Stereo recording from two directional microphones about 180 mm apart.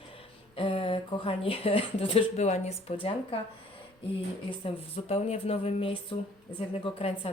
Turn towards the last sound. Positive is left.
turn(degrees=35)  # may be behind; listen again after turning